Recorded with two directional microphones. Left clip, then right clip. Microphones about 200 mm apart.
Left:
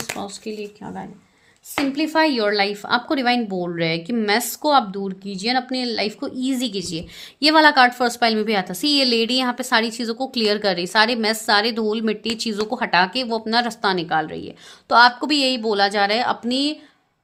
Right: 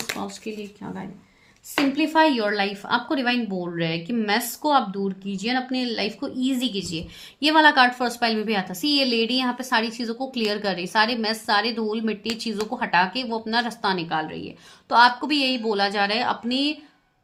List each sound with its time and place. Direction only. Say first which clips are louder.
2.0 s a woman's voice: left 1 dB; 45° left (ahead or behind)